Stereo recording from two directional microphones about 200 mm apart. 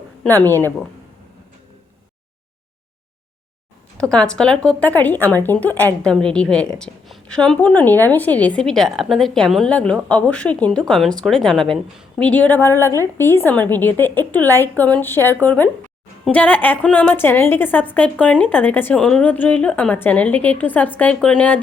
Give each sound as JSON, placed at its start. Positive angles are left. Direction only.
{"t": 0.3, "sound": "a woman's voice", "side_deg": 10}
{"t": 4.1, "sound": "a woman's voice", "side_deg": 5}